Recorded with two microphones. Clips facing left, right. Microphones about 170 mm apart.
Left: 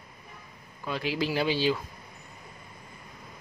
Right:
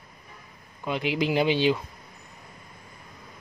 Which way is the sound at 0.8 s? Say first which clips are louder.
Right 3 dB; 20° right (ahead or behind).